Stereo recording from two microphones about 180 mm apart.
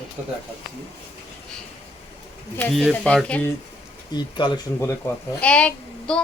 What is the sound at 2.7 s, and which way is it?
Speech, centre (ahead or behind).